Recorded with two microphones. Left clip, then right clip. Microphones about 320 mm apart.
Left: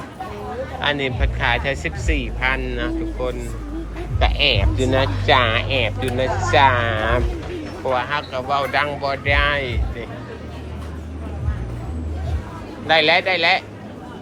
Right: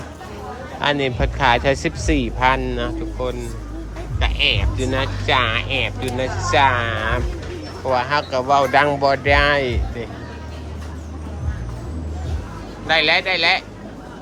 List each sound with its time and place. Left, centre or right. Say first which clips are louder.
0.8 s speech: right 3 dB; centre
12.9 s speech: left 1 dB; centre